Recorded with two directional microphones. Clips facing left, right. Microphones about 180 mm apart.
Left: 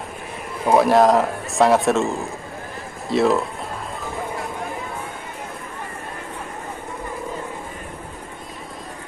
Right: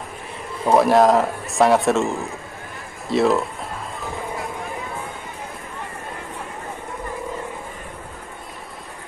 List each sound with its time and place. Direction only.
0.7 s speech: centre (ahead or behind)